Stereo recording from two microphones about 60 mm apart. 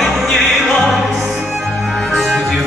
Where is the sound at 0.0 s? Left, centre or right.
Centre.